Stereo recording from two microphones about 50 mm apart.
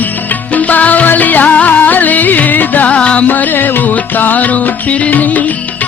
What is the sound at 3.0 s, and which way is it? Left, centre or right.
Music, left.